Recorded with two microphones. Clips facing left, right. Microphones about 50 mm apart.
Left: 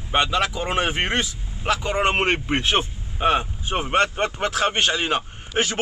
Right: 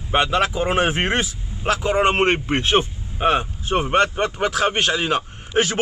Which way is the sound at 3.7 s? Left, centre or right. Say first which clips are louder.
Right 5 dB; centre.